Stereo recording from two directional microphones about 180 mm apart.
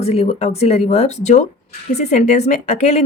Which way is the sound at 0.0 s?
35° left (ahead or behind).